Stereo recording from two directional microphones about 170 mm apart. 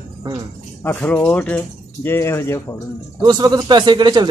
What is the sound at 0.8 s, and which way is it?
Speech, 10° left (ahead or behind).